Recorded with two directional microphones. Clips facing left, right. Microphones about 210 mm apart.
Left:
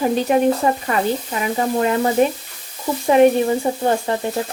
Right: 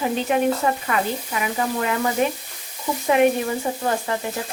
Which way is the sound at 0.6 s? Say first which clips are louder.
Left 3 dB; 25° left (ahead or behind).